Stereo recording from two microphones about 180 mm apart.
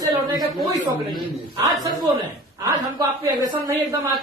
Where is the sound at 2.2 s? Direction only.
20° right (ahead or behind).